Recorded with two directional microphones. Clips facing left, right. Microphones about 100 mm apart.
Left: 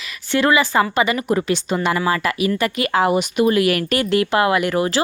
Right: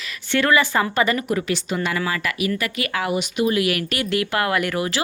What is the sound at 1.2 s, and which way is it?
Speech, 30° left (ahead or behind).